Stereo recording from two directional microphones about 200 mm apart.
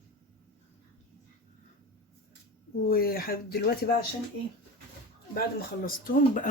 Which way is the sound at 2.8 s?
50° left (ahead or behind).